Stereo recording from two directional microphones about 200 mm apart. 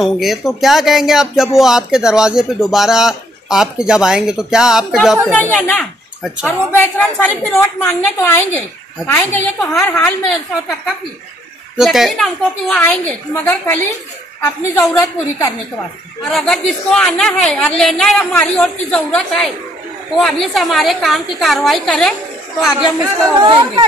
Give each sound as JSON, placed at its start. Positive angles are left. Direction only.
{"t": 0.0, "sound": "a woman's voice", "side_deg": 0}
{"t": 11.7, "sound": "a woman's voice", "side_deg": 0}
{"t": 16.3, "sound": "speech", "side_deg": 0}
{"t": 23.4, "sound": "speech", "side_deg": -20}